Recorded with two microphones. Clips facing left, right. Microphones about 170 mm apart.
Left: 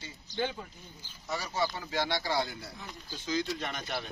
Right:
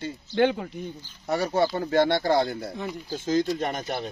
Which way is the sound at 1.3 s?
55° right (ahead or behind).